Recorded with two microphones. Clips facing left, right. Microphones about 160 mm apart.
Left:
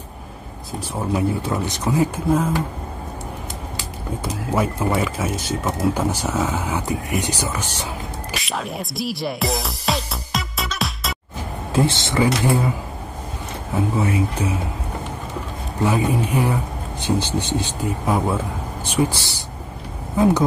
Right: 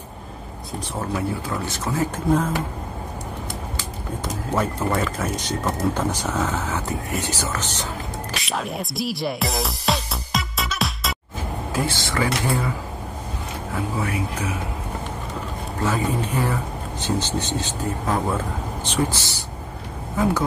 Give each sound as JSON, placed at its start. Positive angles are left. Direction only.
{"t": 1.1, "sound": "speech", "side_deg": 20}
{"t": 3.7, "sound": "speech", "side_deg": 10}
{"t": 8.4, "sound": "music", "side_deg": 0}
{"t": 11.7, "sound": "speech", "side_deg": 25}
{"t": 13.7, "sound": "speech", "side_deg": 25}
{"t": 15.8, "sound": "speech", "side_deg": 15}